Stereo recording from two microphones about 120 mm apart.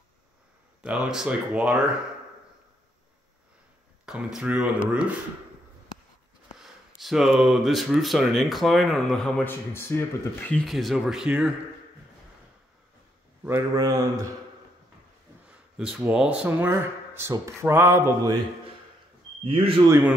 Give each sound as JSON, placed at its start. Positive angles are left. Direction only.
{"t": 0.8, "sound": "speech", "side_deg": -5}
{"t": 4.0, "sound": "speech", "side_deg": -5}
{"t": 6.6, "sound": "speech", "side_deg": 0}
{"t": 9.4, "sound": "speech", "side_deg": 20}
{"t": 10.5, "sound": "speech", "side_deg": 0}
{"t": 13.4, "sound": "a man's voice", "side_deg": -20}
{"t": 15.4, "sound": "speech", "side_deg": -5}
{"t": 19.4, "sound": "speech", "side_deg": -50}
{"t": 19.9, "sound": "speech", "side_deg": -15}